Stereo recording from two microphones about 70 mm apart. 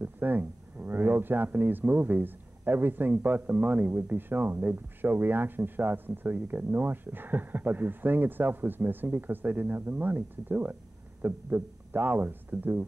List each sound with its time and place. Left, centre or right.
0.0 s speech: right